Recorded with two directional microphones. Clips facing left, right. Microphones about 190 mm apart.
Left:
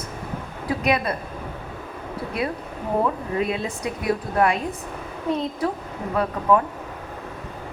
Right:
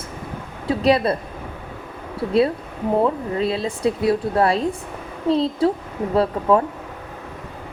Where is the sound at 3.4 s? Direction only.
30° right (ahead or behind).